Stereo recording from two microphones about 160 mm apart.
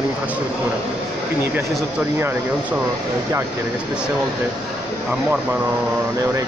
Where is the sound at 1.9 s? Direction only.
15° right (ahead or behind).